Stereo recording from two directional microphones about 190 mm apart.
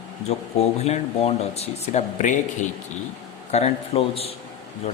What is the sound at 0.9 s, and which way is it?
Speech, 35° left (ahead or behind).